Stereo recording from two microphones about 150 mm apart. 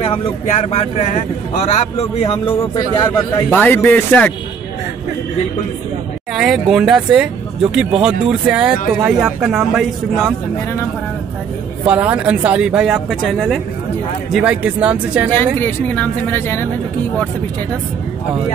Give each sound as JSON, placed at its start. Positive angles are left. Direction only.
{"t": 0.5, "sound": "a man's voice", "side_deg": 50}
{"t": 3.4, "sound": "speech", "side_deg": 10}
{"t": 6.3, "sound": "speech", "side_deg": -5}
{"t": 11.8, "sound": "speech", "side_deg": -10}
{"t": 14.3, "sound": "speech", "side_deg": -10}
{"t": 15.3, "sound": "speech", "side_deg": 10}